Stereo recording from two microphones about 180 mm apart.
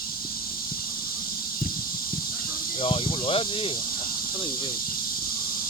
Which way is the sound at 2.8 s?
30° left (ahead or behind).